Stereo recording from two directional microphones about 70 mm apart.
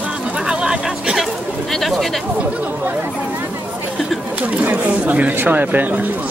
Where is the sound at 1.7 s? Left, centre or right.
Centre.